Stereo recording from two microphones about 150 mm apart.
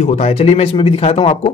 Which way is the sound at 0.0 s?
45° left (ahead or behind).